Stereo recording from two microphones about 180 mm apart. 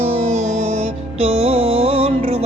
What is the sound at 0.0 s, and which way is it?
Music, 35° right (ahead or behind).